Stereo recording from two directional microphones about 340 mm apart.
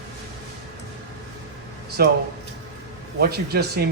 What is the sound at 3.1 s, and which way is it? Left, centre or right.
Speech, right.